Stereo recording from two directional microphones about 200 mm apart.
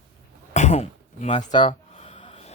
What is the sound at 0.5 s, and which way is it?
Throat clearing, 35° left (ahead or behind).